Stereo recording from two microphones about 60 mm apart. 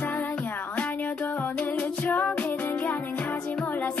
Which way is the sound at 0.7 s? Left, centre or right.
Left.